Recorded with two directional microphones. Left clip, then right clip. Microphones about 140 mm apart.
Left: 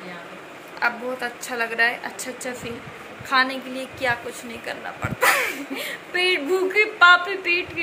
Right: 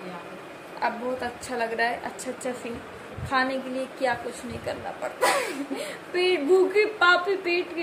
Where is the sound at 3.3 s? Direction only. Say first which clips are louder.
Left 4 dB; 25° right (ahead or behind).